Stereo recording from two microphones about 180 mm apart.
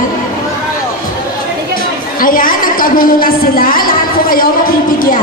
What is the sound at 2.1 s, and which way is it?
A woman's voice, 50° left (ahead or behind).